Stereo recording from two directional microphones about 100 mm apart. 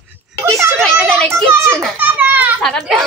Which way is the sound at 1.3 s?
25° right (ahead or behind).